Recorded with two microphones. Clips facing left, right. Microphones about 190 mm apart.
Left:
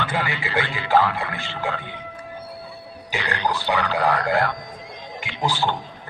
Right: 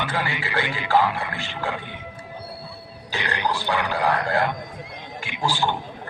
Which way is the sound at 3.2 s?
15° right (ahead or behind).